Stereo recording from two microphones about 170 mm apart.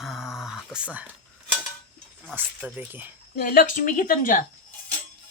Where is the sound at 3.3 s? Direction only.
55° left (ahead or behind).